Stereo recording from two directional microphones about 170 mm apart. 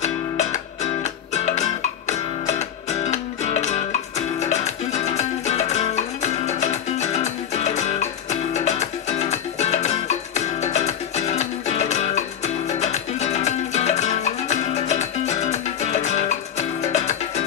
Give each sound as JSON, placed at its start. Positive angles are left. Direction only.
{"t": 0.0, "sound": "music", "side_deg": 45}